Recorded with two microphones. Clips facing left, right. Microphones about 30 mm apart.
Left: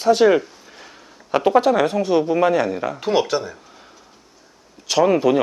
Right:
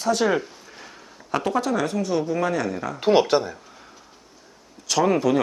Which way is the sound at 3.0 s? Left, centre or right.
Centre.